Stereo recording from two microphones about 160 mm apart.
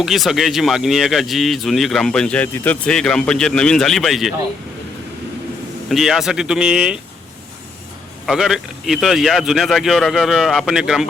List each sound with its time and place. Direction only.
0.0 s speech: centre (ahead or behind)
5.9 s speech: centre (ahead or behind)
8.3 s speech: centre (ahead or behind)